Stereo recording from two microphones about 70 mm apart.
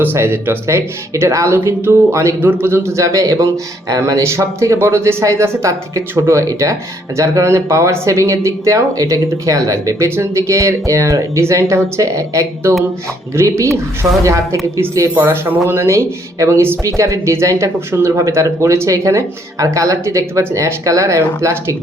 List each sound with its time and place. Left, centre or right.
0.0 s speech: right
1.5 s speech: right
4.2 s speech: right
15.1 s speech: right